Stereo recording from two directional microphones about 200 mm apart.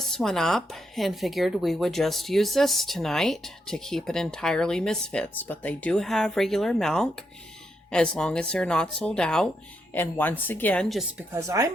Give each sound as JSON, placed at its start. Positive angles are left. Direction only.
{"t": 0.0, "sound": "a woman's voice", "side_deg": 0}
{"t": 11.3, "sound": "speech", "side_deg": -15}